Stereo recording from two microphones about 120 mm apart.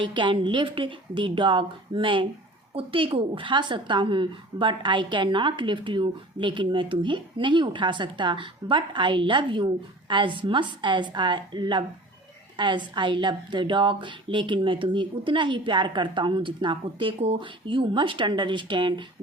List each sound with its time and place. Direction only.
0.0 s a woman's voice: 40° right (ahead or behind)